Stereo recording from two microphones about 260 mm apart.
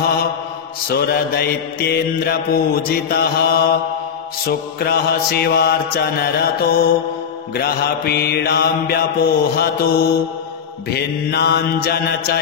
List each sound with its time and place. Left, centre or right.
0.8 s mantra: left